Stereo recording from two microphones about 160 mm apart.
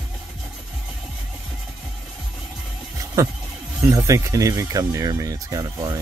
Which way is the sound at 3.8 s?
20° right (ahead or behind).